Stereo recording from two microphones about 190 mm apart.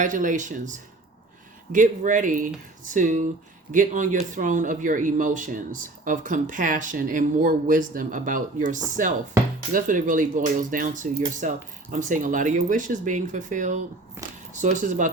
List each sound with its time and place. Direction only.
0.0 s speech: 40° right (ahead or behind)